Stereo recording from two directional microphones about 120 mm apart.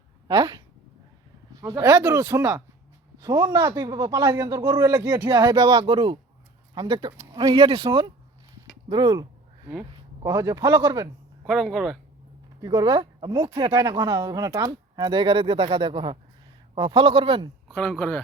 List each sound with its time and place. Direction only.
0.3 s speech: 35° right (ahead or behind)
1.6 s speech: 25° right (ahead or behind)
3.2 s speech: 30° right (ahead or behind)
10.2 s speech: 25° right (ahead or behind)
11.4 s speech: centre (ahead or behind)
12.6 s speech: 35° right (ahead or behind); by 17.5 s 50° right (ahead or behind)
17.7 s speech: 5° left (ahead or behind)